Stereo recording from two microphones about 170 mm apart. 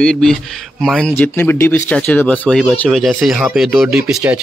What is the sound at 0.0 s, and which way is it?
Speech, 5° left (ahead or behind).